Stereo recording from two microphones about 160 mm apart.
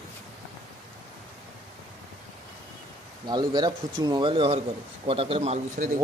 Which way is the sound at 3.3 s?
30° right (ahead or behind).